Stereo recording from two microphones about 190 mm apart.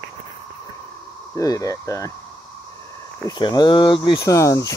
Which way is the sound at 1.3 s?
15° left (ahead or behind).